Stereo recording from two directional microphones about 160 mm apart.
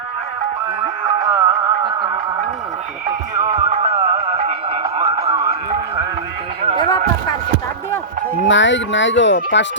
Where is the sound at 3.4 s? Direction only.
40° right (ahead or behind).